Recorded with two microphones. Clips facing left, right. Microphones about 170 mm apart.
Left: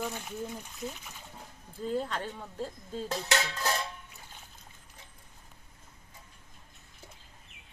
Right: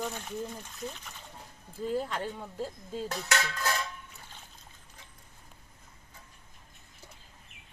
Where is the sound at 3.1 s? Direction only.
25° left (ahead or behind).